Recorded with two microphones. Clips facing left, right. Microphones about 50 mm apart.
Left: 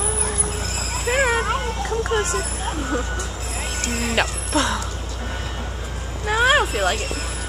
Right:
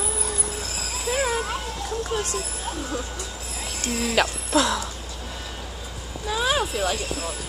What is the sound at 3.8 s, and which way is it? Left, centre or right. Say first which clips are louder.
Speech: even; left.